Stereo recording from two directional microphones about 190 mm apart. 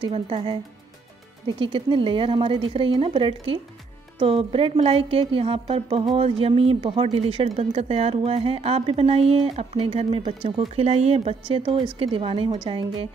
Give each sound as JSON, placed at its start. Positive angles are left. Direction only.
{"t": 0.0, "sound": "speech", "side_deg": -30}
{"t": 1.6, "sound": "speech", "side_deg": -25}